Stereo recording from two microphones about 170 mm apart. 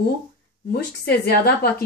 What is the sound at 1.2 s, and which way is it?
Speech, 65° left (ahead or behind).